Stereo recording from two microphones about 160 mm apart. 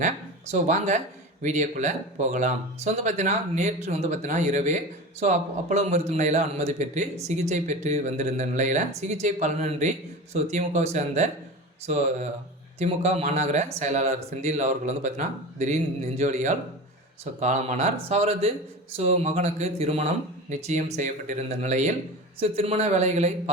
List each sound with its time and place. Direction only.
0.0 s speech: 50° right (ahead or behind)